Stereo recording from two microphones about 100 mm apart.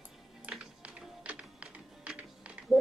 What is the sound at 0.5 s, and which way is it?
Music, 10° right (ahead or behind).